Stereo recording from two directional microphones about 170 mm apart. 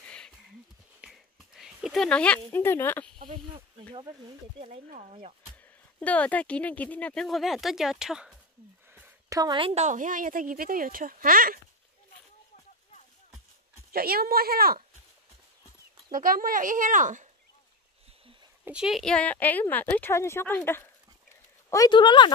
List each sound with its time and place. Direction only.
0.0 s a sound: 5° left (ahead or behind)
3.2 s speech: 30° right (ahead or behind)
4.6 s speech: 50° right (ahead or behind)
5.5 s speech: 10° left (ahead or behind)
8.9 s a sound: 10° right (ahead or behind)
9.4 s speech: 30° right (ahead or behind)
9.8 s speech: 50° right (ahead or behind)
13.9 s speech: 65° right (ahead or behind)
16.1 s speech: 55° right (ahead or behind)
18.7 s a woman's voice: 5° right (ahead or behind); by 22.3 s 25° left (ahead or behind)